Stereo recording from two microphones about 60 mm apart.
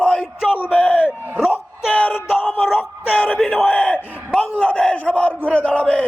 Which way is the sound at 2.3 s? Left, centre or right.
Centre.